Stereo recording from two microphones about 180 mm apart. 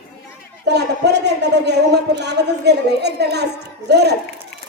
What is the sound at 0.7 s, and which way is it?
A man's voice, 70° right (ahead or behind).